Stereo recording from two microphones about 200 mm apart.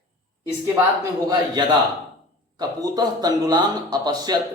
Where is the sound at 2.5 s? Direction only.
20° right (ahead or behind).